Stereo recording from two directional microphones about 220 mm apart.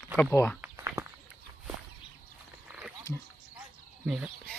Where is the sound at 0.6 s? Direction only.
10° right (ahead or behind).